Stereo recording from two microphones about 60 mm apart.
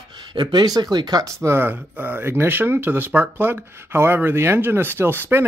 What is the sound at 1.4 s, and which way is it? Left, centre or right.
Speech, right.